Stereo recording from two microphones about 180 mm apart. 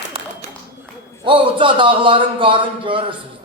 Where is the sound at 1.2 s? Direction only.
25° right (ahead or behind).